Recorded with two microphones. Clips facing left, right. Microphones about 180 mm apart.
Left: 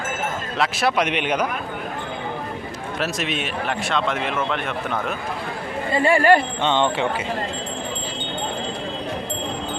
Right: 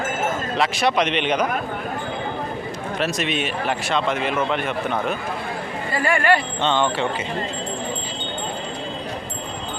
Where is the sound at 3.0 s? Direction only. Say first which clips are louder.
Right 2 dB; centre (ahead or behind).